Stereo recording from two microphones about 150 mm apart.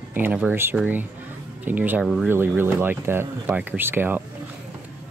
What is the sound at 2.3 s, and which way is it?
Speech, 15° right (ahead or behind).